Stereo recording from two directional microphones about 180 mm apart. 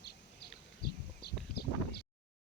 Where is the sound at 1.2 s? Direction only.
65° left (ahead or behind).